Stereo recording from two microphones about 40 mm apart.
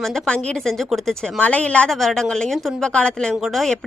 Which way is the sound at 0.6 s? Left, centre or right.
Centre.